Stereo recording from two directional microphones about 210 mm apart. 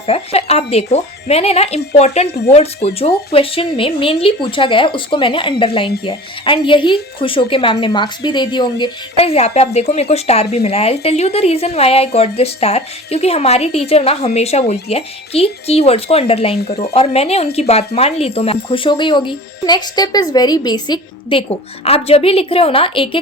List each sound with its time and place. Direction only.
0.1 s speech: 30° left (ahead or behind)